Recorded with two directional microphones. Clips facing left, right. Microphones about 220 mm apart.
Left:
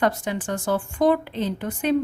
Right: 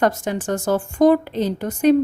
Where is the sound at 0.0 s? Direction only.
45° right (ahead or behind).